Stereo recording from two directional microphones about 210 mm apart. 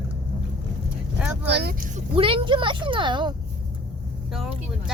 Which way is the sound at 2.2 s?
25° right (ahead or behind).